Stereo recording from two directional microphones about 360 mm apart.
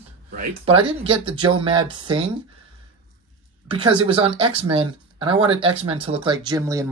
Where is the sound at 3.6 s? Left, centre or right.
Centre.